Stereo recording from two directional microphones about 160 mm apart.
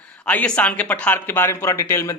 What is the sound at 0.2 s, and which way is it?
Speech, 10° left (ahead or behind).